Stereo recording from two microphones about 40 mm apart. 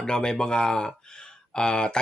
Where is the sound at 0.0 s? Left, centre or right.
Centre.